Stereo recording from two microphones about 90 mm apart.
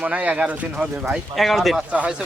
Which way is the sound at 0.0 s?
15° right (ahead or behind).